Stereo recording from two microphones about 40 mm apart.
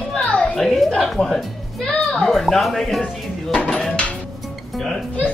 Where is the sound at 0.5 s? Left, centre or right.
Centre.